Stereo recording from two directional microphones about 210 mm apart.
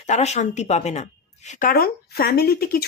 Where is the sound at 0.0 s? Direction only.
35° left (ahead or behind).